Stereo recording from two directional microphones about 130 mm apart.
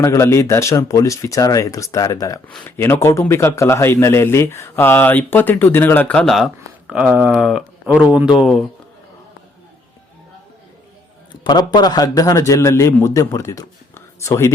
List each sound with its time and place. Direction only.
0.0 s speech: 25° left (ahead or behind); by 6.5 s centre (ahead or behind)
6.8 s speech: 10° right (ahead or behind)
11.3 s speech: 35° left (ahead or behind)